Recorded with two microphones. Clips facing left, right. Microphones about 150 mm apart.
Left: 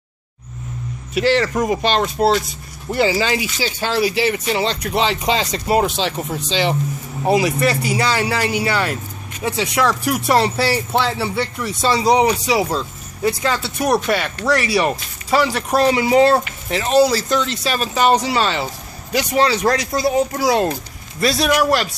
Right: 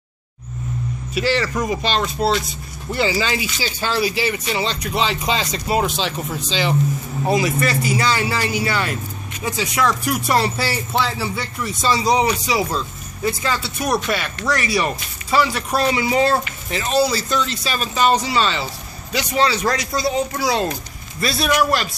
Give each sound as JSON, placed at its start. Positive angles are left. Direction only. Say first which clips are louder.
{"t": 1.1, "sound": "speech", "louder": "left 4 dB", "side_deg": 60}
{"t": 5.7, "sound": "speech", "louder": "left 3 dB", "side_deg": 55}
{"t": 21.2, "sound": "a man's voice", "louder": "left 2 dB", "side_deg": 80}